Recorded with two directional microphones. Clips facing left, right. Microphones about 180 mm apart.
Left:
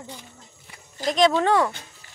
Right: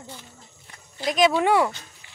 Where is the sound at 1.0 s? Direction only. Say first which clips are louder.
Even; 5° right (ahead or behind).